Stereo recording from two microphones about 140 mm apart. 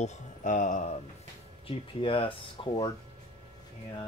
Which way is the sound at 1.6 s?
40° left (ahead or behind).